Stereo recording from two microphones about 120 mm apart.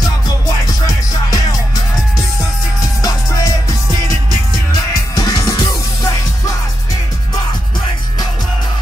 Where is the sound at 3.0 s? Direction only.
30° left (ahead or behind).